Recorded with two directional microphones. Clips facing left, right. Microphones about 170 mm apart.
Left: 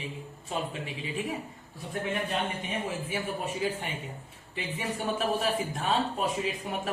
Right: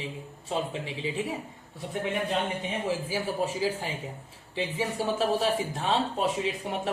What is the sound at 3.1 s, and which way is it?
Speech, 30° right (ahead or behind).